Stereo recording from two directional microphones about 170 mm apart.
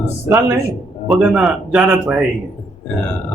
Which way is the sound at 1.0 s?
5° right (ahead or behind).